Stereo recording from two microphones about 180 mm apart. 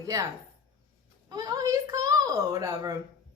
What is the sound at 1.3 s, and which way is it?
A woman's voice, 20° right (ahead or behind).